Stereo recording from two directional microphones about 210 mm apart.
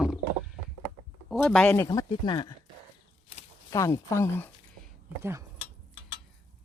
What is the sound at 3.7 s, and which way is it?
Speech, 15° left (ahead or behind).